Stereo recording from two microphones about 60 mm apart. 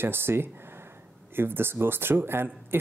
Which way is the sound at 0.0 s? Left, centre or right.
Right.